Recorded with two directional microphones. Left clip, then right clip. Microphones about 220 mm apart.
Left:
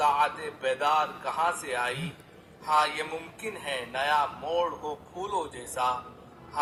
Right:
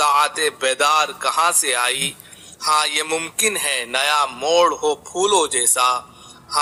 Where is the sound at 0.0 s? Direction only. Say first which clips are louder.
Right 8 dB; 45° right (ahead or behind).